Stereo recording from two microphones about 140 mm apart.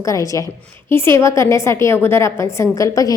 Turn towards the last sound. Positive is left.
turn(degrees=25)  # may be behind; listen again after turning